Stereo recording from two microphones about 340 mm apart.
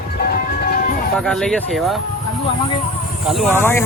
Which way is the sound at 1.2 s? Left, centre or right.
Centre.